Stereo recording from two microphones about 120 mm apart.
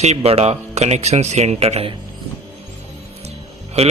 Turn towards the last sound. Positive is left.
turn(degrees=-60)  # may be behind; listen again after turning